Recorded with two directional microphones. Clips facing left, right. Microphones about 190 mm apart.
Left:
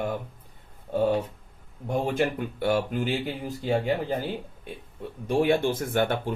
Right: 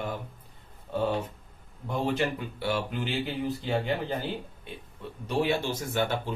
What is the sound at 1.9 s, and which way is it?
Speech, 50° left (ahead or behind).